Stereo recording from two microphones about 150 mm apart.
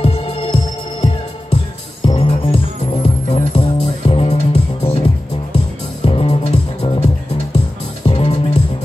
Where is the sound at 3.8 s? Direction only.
40° left (ahead or behind).